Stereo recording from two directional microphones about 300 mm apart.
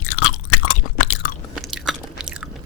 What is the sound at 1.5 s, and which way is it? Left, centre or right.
Biting, centre.